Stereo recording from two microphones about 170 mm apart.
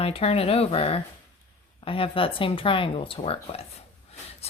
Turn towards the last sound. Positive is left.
turn(degrees=35)  # may be behind; listen again after turning